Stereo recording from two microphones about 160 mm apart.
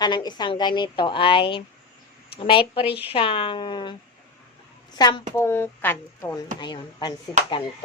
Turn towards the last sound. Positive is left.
turn(degrees=30)  # may be behind; listen again after turning